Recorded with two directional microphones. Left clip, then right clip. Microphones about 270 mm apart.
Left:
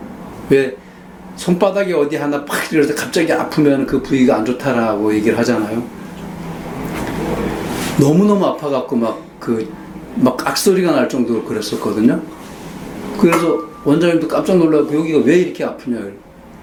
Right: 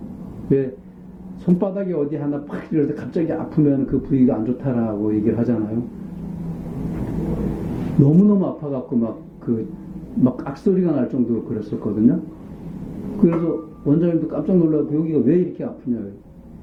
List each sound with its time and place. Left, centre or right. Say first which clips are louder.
1.5 s speech: left 8 dB; centre
6.7 s a sound: left 6 dB; centre
8.0 s speech: left 4 dB; left
8.3 s speech: left 7 dB; centre
13.2 s speech: left 6 dB; centre